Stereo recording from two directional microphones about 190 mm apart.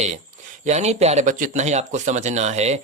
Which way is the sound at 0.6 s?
35° right (ahead or behind).